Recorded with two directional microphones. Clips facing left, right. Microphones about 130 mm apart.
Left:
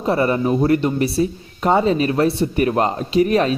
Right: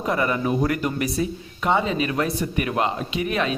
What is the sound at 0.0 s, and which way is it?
Speech, 35° left (ahead or behind).